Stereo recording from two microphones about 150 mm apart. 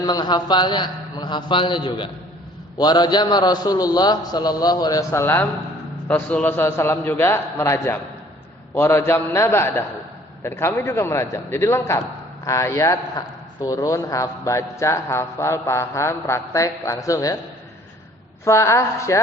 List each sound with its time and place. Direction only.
0.0 s a man's voice: 25° left (ahead or behind)
18.4 s a man's voice: 20° left (ahead or behind)